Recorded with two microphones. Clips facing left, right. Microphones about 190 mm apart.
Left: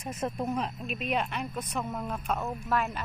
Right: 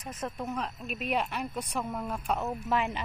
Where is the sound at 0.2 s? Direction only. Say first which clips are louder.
Left 4 dB; 30° left (ahead or behind).